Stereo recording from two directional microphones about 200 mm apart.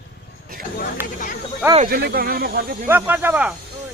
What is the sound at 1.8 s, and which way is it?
Speech, 50° right (ahead or behind).